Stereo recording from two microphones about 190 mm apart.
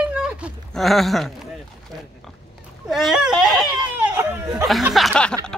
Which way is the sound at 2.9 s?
Centre (ahead or behind).